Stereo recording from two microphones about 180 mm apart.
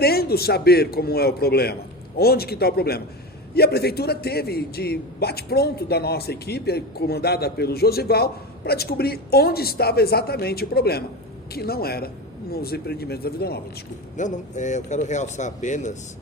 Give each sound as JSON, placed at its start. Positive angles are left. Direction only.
{"t": 0.0, "sound": "a man's voice", "side_deg": 60}
{"t": 14.2, "sound": "speech", "side_deg": 40}